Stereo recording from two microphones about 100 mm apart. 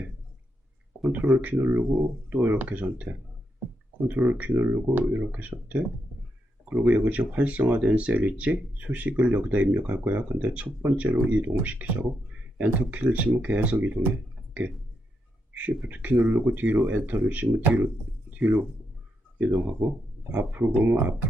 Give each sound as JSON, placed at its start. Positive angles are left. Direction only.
{"t": 1.1, "sound": "speech", "side_deg": -15}
{"t": 15.5, "sound": "speech", "side_deg": -15}
{"t": 18.3, "sound": "a sound", "side_deg": -15}
{"t": 19.5, "sound": "speech", "side_deg": 0}
{"t": 20.5, "sound": "speech", "side_deg": -15}